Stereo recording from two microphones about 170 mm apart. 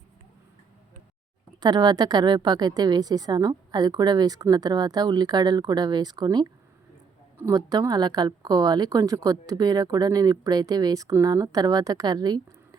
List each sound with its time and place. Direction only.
1.6 s a woman's voice: 25° right (ahead or behind)